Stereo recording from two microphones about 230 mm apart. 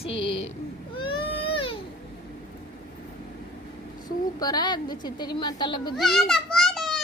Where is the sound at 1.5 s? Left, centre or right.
Left.